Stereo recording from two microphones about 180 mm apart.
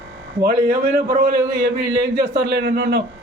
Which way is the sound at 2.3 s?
65° right (ahead or behind).